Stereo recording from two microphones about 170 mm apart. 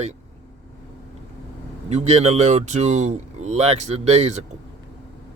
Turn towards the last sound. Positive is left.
turn(degrees=-40)  # may be behind; listen again after turning